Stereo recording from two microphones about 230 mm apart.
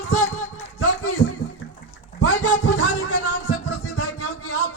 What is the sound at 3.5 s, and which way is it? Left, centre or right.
Music, left.